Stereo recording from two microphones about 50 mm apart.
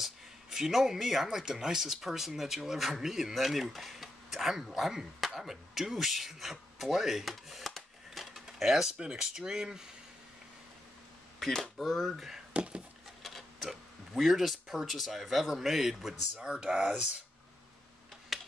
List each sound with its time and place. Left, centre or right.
0.0 s speech: centre
8.9 s speech: centre
11.3 s speech: centre
11.8 s speech: centre
12.5 s wood: right
13.2 s speech: centre
16.3 s speech: centre
18.3 s tick-tock: centre